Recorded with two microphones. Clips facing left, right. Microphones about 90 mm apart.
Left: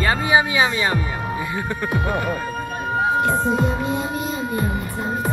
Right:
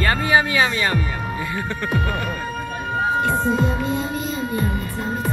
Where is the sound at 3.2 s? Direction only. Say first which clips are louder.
Even; 45° left (ahead or behind).